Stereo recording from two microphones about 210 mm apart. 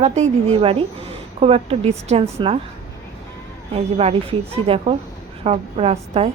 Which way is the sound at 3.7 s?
30° right (ahead or behind).